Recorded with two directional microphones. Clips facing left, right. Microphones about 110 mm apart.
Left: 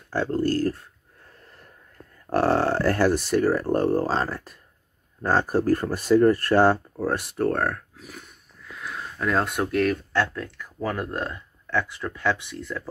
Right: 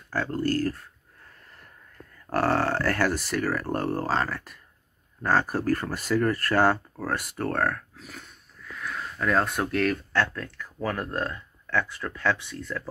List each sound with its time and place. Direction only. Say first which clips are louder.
0.1 s speech: left 3 dB; 25° left (ahead or behind)
2.3 s speech: left 3 dB; 20° left (ahead or behind)
8.7 s a sound: even; 20° left (ahead or behind)
9.7 s speech: left 3 dB; 10° left (ahead or behind)
10.1 s speech: left 2 dB; 20° left (ahead or behind)